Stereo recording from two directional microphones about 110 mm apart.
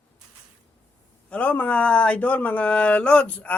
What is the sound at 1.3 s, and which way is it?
Speech, 10° left (ahead or behind).